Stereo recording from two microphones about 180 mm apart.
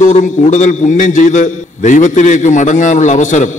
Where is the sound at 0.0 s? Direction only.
45° left (ahead or behind).